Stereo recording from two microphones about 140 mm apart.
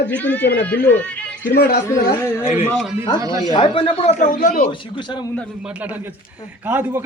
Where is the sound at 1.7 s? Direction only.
90° left.